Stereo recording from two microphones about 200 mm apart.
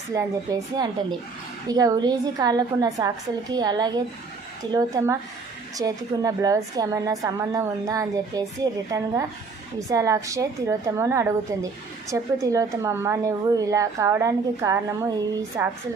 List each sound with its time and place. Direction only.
0.1 s a woman's voice: 15° right (ahead or behind)